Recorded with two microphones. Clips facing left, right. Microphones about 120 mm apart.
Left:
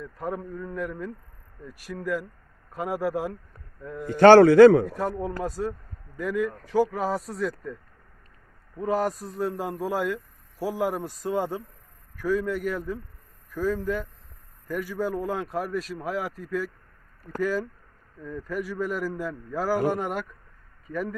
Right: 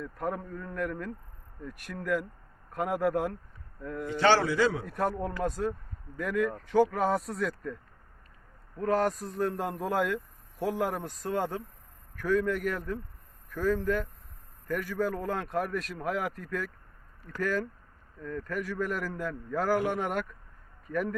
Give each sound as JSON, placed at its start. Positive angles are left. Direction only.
{"t": 0.0, "sound": "speech", "side_deg": 0}
{"t": 4.1, "sound": "a man's voice", "side_deg": 50}
{"t": 4.9, "sound": "speech", "side_deg": 0}
{"t": 8.8, "sound": "speech", "side_deg": 5}